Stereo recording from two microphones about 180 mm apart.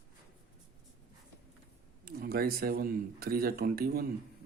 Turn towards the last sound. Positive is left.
turn(degrees=-55)  # may be behind; listen again after turning